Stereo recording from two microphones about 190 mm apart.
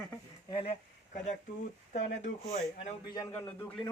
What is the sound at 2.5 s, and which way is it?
Speech, 35° left (ahead or behind).